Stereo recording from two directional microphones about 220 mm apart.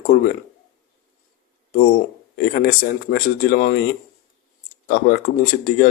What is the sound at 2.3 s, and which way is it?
Speech, 45° left (ahead or behind).